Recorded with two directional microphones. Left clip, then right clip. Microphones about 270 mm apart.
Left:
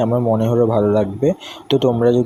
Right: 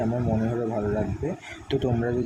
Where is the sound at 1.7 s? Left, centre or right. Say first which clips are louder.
Left 12 dB; left.